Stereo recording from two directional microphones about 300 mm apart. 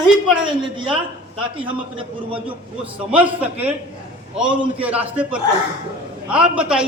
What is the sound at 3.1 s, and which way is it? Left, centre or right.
Speech, centre.